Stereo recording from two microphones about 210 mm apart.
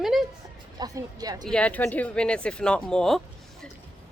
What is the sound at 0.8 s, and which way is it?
Speech, 20° right (ahead or behind).